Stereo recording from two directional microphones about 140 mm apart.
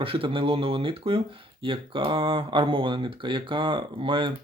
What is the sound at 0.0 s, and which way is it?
Speech, 40° right (ahead or behind).